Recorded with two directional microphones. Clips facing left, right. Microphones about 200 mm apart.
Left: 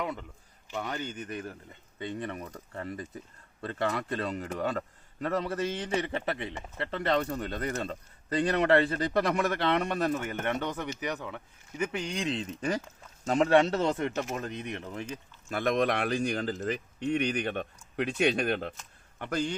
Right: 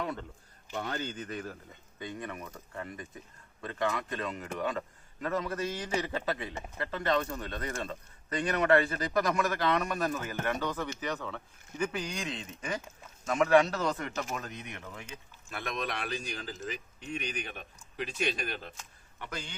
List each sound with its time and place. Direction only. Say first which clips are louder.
0.9 s speech: left 1 dB; 20° left (ahead or behind)
15.4 s speech: left 10 dB; 50° left (ahead or behind)
19.2 s a man's voice: left 10 dB; 45° left (ahead or behind)